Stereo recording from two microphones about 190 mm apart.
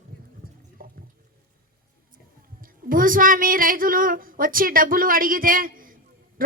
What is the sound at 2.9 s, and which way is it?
A woman's voice, 45° right (ahead or behind).